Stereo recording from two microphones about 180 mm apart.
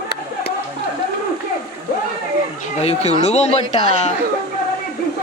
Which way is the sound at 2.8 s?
35° left (ahead or behind).